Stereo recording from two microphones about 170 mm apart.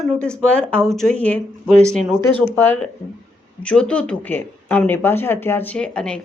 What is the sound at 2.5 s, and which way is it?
Speech, 10° left (ahead or behind).